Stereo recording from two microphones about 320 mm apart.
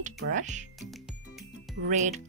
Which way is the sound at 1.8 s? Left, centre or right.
Right.